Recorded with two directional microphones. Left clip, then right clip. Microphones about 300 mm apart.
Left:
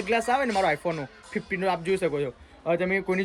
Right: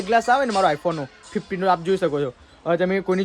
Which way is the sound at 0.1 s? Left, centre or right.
Centre.